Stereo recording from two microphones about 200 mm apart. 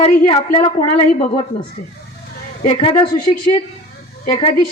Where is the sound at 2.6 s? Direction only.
30° left (ahead or behind).